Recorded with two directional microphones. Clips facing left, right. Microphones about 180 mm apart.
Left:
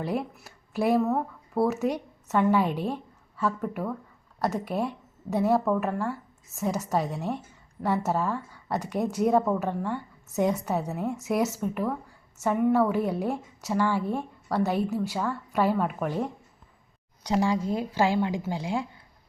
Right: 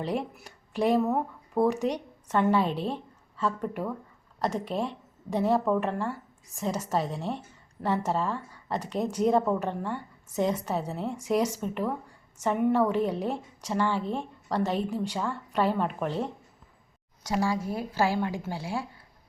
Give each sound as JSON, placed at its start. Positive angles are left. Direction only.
{"t": 0.0, "sound": "speech", "side_deg": 5}
{"t": 0.9, "sound": "speech", "side_deg": -15}
{"t": 1.5, "sound": "a woman's voice", "side_deg": 5}